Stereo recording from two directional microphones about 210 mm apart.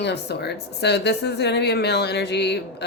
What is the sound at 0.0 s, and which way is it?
A woman's voice, 55° left (ahead or behind).